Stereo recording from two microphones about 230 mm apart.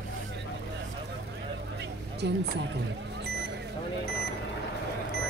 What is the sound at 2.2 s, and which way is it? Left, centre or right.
Speech, right.